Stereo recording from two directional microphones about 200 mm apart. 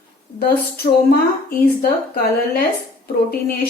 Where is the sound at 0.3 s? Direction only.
50° left (ahead or behind).